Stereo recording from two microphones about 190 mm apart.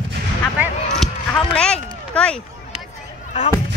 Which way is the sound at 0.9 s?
5° left (ahead or behind).